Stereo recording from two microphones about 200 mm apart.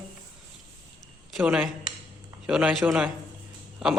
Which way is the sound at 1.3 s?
5° right (ahead or behind).